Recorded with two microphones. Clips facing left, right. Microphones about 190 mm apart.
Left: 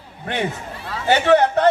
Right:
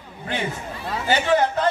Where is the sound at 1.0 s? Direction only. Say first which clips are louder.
Left 5 dB; 65° left (ahead or behind).